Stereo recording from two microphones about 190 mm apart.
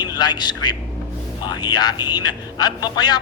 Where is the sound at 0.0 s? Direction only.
20° left (ahead or behind).